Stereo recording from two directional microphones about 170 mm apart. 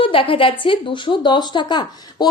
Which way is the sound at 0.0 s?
30° left (ahead or behind).